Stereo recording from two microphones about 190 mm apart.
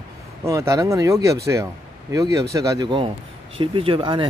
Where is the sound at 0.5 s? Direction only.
15° right (ahead or behind).